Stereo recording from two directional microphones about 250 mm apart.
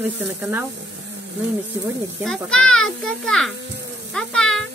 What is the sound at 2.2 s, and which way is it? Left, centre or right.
A child's voice, centre.